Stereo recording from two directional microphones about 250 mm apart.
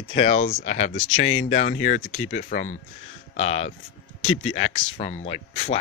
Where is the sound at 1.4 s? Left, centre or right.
Left.